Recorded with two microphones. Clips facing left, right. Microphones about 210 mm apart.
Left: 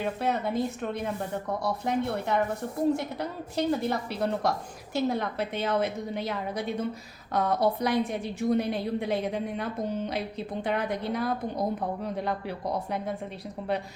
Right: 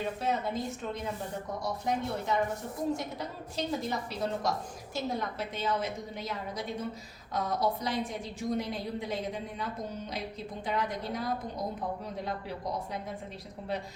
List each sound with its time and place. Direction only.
0.0 s a woman's voice: 60° left (ahead or behind)